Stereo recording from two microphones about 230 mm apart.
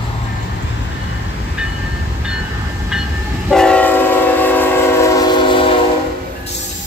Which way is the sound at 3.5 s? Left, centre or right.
Centre.